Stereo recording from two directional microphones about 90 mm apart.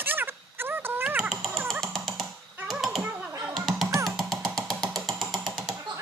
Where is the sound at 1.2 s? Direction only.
5° right (ahead or behind).